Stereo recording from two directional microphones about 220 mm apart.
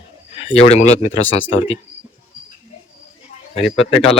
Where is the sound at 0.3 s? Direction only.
25° left (ahead or behind).